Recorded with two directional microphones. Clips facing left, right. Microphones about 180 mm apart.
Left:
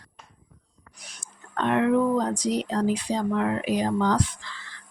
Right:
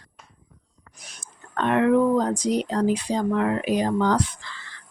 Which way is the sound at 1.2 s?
50° right (ahead or behind).